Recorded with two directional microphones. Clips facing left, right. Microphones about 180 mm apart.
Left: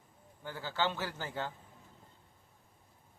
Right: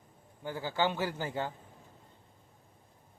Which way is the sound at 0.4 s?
15° right (ahead or behind).